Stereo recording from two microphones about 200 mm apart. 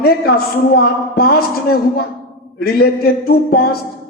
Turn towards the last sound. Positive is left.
turn(degrees=50)  # may be behind; listen again after turning